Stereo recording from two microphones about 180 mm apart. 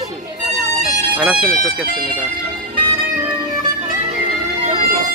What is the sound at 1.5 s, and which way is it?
Speech, 50° right (ahead or behind).